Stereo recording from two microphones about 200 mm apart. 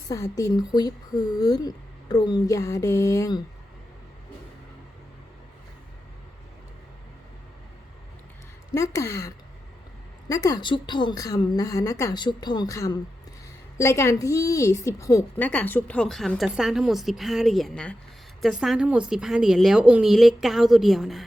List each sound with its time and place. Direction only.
0.1 s speech: 15° left (ahead or behind)
8.7 s a woman's voice: 15° left (ahead or behind); by 21.2 s centre (ahead or behind)